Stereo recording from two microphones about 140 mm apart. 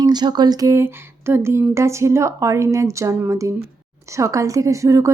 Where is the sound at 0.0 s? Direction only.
30° right (ahead or behind).